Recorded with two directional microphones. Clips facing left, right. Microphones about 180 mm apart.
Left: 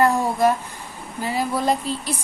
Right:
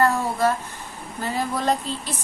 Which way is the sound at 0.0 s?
15° left (ahead or behind).